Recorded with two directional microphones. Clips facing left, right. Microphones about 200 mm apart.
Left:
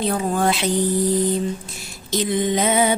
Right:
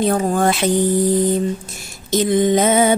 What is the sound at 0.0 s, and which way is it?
Music, 45° right (ahead or behind).